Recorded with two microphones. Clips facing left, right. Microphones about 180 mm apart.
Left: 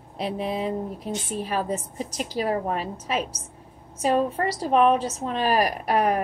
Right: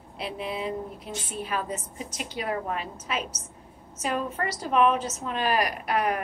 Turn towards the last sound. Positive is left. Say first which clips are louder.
# left 4 dB
turn(degrees=35)  # may be behind; listen again after turning